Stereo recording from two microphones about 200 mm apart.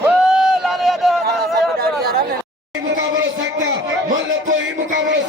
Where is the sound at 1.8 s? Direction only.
50° right (ahead or behind).